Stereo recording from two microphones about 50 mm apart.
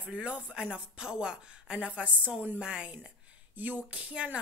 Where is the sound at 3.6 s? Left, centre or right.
Right.